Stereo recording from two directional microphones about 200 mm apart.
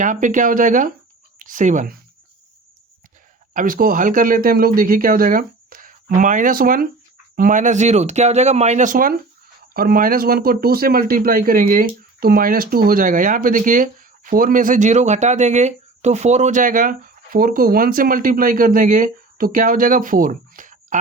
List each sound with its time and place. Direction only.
0.0 s speech: 40° right (ahead or behind)
3.5 s speech: 45° right (ahead or behind)